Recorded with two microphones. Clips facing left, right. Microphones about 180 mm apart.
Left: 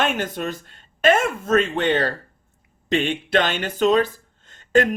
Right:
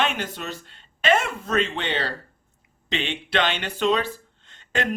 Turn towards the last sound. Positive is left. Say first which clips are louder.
# left 10 dB
turn(degrees=45)  # may be behind; listen again after turning